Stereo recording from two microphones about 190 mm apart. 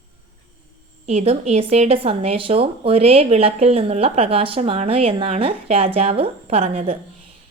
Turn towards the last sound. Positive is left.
turn(degrees=-30)  # may be behind; listen again after turning